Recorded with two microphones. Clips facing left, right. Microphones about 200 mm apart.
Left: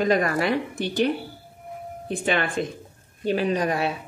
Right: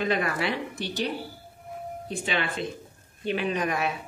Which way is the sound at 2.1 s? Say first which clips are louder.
Left 5 dB; 50° left (ahead or behind).